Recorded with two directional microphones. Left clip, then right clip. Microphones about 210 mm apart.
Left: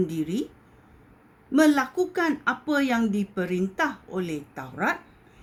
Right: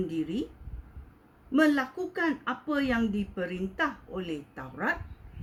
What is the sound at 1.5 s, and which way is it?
Speech, 50° left (ahead or behind).